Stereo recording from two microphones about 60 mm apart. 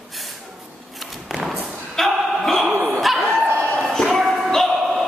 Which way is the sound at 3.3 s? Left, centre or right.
Right.